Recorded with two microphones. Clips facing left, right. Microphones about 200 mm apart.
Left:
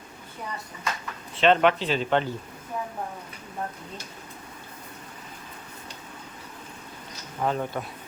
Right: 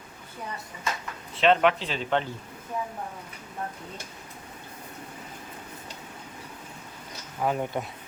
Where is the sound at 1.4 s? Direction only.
Centre (ahead or behind).